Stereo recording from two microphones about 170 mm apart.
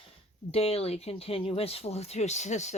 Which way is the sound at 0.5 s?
35° left (ahead or behind).